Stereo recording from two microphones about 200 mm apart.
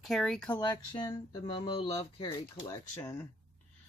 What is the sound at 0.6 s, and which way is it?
Speech, 20° left (ahead or behind).